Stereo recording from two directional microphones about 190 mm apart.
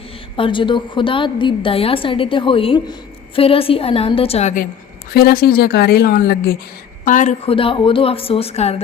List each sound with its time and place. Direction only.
0.3 s a woman's voice: 25° left (ahead or behind); by 4.7 s 40° left (ahead or behind)
5.1 s a woman's voice: 50° left (ahead or behind)
7.0 s a woman's voice: 40° left (ahead or behind)